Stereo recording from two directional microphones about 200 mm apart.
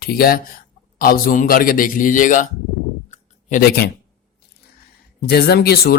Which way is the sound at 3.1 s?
40° left (ahead or behind).